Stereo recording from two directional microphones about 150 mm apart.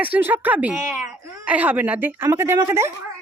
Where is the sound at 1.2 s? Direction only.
20° right (ahead or behind).